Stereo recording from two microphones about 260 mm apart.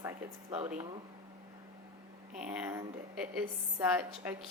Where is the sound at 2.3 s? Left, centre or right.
Centre.